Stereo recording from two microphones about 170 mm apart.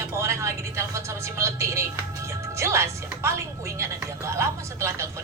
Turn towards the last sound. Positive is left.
turn(degrees=-15)  # may be behind; listen again after turning